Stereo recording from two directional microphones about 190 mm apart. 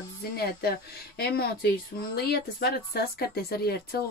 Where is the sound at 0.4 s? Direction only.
55° left (ahead or behind).